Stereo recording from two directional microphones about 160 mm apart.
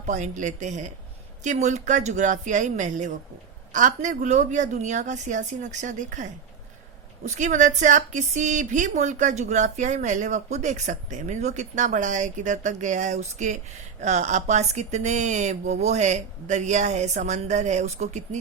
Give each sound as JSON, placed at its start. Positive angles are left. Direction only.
{"t": 0.0, "sound": "a woman's voice", "side_deg": -50}
{"t": 7.3, "sound": "a woman's voice", "side_deg": -50}